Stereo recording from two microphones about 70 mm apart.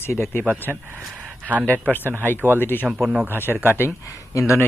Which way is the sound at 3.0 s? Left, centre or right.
Centre.